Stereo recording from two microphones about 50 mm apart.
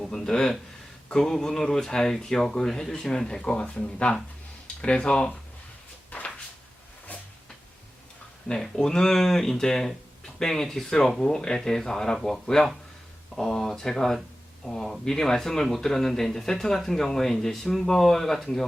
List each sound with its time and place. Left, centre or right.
0.0 s speech: centre
6.1 s a sound: left
8.4 s speech: centre